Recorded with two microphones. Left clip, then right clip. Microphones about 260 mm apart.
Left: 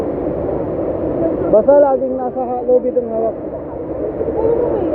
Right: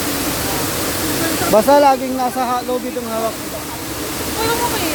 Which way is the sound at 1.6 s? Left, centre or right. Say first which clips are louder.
Left 1 dB; right.